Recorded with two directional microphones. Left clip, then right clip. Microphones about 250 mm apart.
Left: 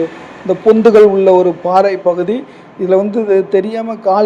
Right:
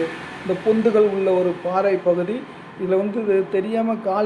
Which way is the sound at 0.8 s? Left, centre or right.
Left.